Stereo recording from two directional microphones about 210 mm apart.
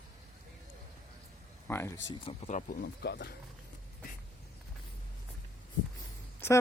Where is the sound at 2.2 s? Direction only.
30° left (ahead or behind).